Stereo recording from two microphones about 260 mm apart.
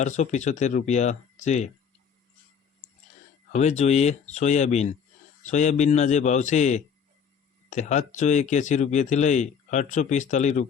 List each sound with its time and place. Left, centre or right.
0.0 s speech: left
3.5 s speech: left